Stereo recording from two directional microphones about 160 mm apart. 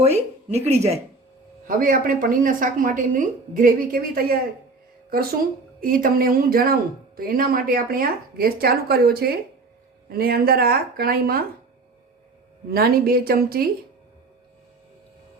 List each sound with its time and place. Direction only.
0.0 s speech: 40° right (ahead or behind)
1.6 s a woman's voice: 60° right (ahead or behind)
5.8 s a woman's voice: 60° right (ahead or behind)
12.7 s speech: 70° right (ahead or behind)